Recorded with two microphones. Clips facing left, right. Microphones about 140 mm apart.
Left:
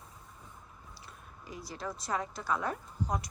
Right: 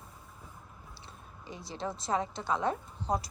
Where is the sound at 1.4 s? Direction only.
25° right (ahead or behind).